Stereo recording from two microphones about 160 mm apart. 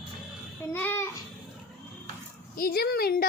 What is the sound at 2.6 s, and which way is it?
Speech, 75° left (ahead or behind).